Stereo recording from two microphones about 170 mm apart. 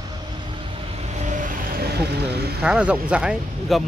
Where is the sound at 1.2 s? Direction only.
50° right (ahead or behind).